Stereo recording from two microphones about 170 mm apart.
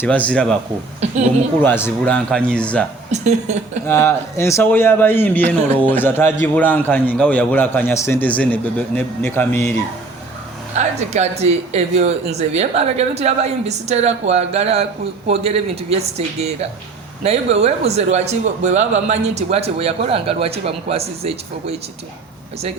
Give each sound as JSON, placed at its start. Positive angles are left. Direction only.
{"t": 0.0, "sound": "a man's voice", "side_deg": 10}
{"t": 1.0, "sound": "speech", "side_deg": -40}
{"t": 1.6, "sound": "a man's voice", "side_deg": 10}
{"t": 3.1, "sound": "speech", "side_deg": -40}
{"t": 3.8, "sound": "a man's voice", "side_deg": 15}
{"t": 10.8, "sound": "speech", "side_deg": -40}